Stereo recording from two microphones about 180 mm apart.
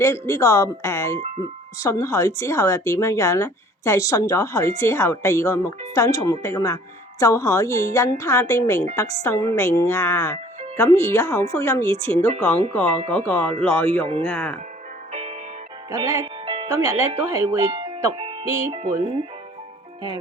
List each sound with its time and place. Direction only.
0.0 s speech: 15° left (ahead or behind)
15.9 s speech: 15° right (ahead or behind)
17.7 s music: 30° right (ahead or behind)
18.4 s speech: 15° right (ahead or behind)